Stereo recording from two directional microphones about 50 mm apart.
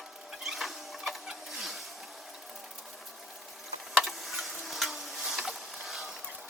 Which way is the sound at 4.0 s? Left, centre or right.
Centre.